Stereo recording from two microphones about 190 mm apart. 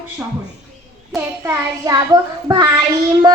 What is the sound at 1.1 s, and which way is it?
A child's voice, 15° right (ahead or behind).